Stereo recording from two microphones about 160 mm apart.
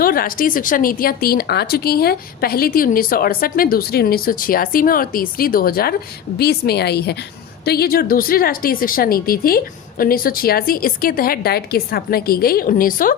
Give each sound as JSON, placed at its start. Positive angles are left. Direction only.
{"t": 0.0, "sound": "speech", "side_deg": 65}
{"t": 6.4, "sound": "a woman's voice", "side_deg": 90}